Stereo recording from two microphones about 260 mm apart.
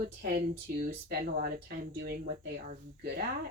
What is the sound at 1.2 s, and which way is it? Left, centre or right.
Speech, right.